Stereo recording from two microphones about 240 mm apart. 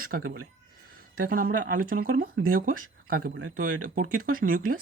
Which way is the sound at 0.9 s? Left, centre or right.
Right.